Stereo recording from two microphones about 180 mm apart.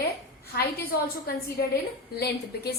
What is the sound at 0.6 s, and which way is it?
A woman's voice, 60° left (ahead or behind).